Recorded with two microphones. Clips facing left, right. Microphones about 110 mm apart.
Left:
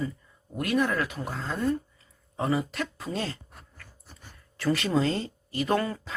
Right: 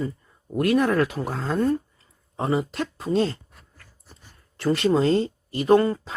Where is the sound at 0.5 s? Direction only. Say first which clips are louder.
Right 6 dB; 50° right (ahead or behind).